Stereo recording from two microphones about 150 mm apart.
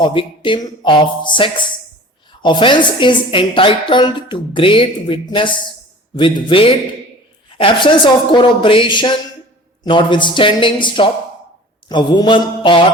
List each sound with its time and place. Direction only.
0.0 s a woman's voice: 35° left (ahead or behind)
11.9 s mantra: 30° left (ahead or behind)